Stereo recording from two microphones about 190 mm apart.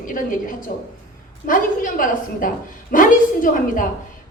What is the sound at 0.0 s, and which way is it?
Speech, 45° left (ahead or behind).